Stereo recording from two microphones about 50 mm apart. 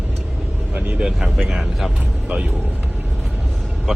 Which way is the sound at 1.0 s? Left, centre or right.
Centre.